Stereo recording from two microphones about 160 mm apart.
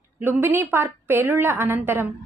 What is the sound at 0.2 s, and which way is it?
A woman's voice, 15° right (ahead or behind).